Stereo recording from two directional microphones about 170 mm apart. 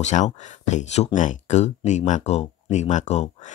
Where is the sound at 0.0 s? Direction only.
45° left (ahead or behind).